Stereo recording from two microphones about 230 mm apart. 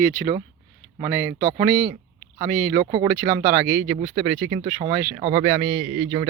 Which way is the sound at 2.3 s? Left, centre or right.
Centre.